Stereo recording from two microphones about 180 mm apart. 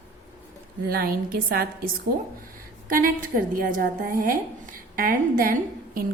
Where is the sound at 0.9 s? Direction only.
55° right (ahead or behind).